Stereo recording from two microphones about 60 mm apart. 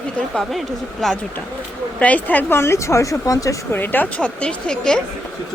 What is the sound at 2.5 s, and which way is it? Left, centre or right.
A woman's voice, left.